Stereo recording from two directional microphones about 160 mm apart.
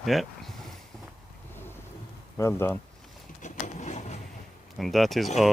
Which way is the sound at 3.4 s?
50° left (ahead or behind).